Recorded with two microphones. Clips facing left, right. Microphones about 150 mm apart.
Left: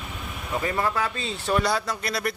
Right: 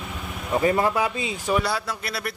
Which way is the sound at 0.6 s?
20° right (ahead or behind).